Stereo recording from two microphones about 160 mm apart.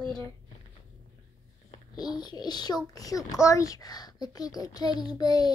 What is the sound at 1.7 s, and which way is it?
A child's voice, 25° left (ahead or behind).